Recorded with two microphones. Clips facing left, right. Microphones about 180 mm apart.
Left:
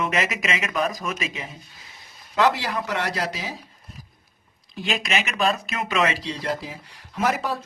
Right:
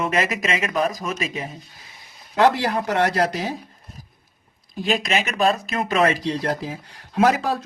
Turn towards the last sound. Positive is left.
turn(degrees=-75)  # may be behind; listen again after turning